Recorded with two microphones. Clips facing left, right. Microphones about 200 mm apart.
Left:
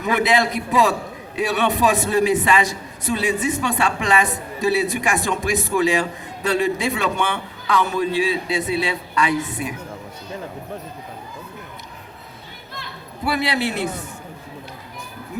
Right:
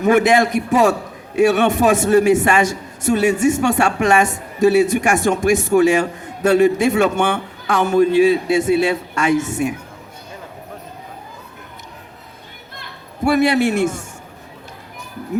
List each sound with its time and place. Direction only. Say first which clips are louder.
0.0 s a man's voice: right 6 dB; 45° right (ahead or behind)
13.2 s a man's voice: right 8 dB; 50° right (ahead or behind)